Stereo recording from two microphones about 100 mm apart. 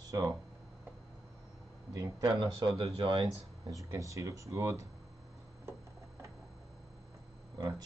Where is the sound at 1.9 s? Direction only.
40° right (ahead or behind).